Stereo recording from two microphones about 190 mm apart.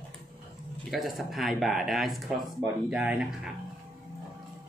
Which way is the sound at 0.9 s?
Centre (ahead or behind).